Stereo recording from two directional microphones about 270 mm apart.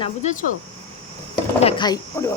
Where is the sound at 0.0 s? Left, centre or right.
Left.